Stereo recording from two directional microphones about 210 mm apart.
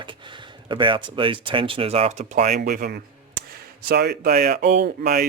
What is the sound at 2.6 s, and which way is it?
Speech, 50° right (ahead or behind).